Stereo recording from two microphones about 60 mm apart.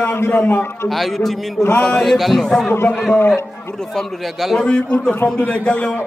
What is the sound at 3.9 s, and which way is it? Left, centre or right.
Speech, centre.